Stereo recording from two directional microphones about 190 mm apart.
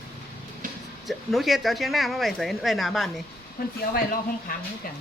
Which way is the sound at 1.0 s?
Centre (ahead or behind).